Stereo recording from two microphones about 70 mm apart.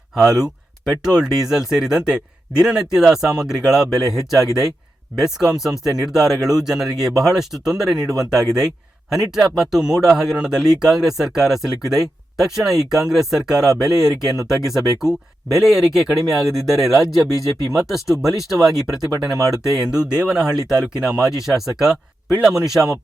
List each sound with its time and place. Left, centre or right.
0.1 s speech: centre